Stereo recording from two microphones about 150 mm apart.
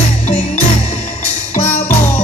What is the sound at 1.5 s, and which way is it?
Music, 45° left (ahead or behind).